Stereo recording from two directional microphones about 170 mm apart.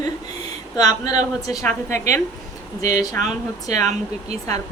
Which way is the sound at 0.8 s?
25° left (ahead or behind).